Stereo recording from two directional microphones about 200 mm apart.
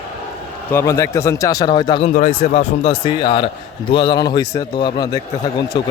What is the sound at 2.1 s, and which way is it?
A man's voice, 35° left (ahead or behind).